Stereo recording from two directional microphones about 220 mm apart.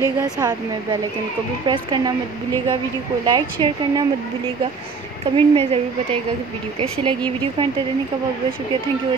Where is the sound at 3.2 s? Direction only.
20° right (ahead or behind).